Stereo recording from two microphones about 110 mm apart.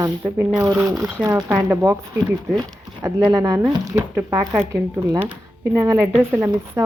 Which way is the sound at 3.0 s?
30° right (ahead or behind).